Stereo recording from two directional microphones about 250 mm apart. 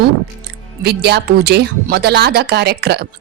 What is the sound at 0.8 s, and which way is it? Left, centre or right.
A woman's voice, right.